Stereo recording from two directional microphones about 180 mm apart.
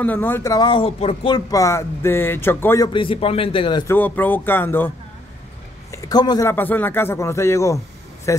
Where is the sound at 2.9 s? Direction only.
30° left (ahead or behind).